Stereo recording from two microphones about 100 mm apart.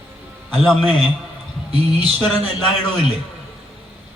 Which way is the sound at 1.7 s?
80° right.